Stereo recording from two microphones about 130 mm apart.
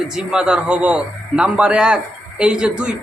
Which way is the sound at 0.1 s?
5° right (ahead or behind).